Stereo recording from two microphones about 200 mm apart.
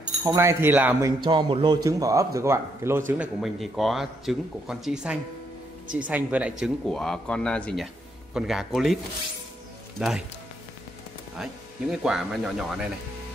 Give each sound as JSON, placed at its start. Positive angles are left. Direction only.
{"t": 0.2, "sound": "speech", "side_deg": -15}
{"t": 1.2, "sound": "speech", "side_deg": -25}
{"t": 9.9, "sound": "speech", "side_deg": 0}
{"t": 11.9, "sound": "speech", "side_deg": 0}